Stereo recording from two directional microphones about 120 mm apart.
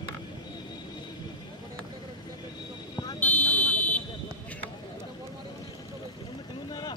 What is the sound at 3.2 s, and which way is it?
Vehicle, 15° left (ahead or behind).